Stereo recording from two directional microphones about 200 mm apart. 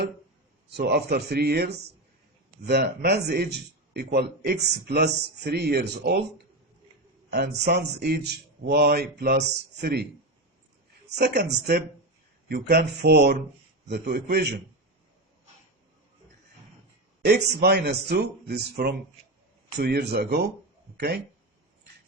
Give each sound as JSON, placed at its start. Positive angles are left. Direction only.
{"t": 0.8, "sound": "a man's voice", "side_deg": -55}
{"t": 7.3, "sound": "a man's voice", "side_deg": -55}
{"t": 12.5, "sound": "a man's voice", "side_deg": -50}
{"t": 17.2, "sound": "a man's voice", "side_deg": -55}